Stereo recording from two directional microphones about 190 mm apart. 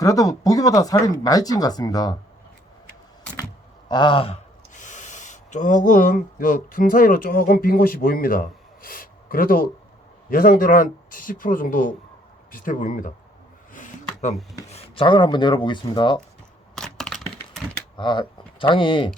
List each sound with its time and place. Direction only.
0.0 s speech: 20° left (ahead or behind)
3.8 s speech: 25° left (ahead or behind); by 13.1 s 45° left (ahead or behind)
13.7 s a sound: 40° left (ahead or behind)
14.7 s rub: 30° left (ahead or behind)
16.7 s computer keyboard: centre (ahead or behind)
17.9 s speech: 25° left (ahead or behind)